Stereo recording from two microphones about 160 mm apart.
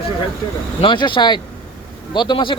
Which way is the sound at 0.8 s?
30° left (ahead or behind).